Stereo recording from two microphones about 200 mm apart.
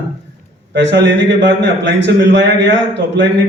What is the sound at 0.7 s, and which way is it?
A man's voice, 60° right (ahead or behind).